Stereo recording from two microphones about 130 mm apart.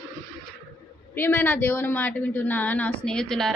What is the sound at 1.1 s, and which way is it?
A woman's voice, 15° left (ahead or behind).